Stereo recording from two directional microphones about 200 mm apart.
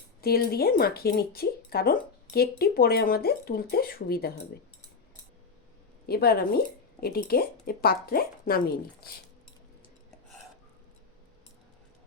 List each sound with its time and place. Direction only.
0.2 s speech: 50° left (ahead or behind)
6.1 s speech: 50° left (ahead or behind)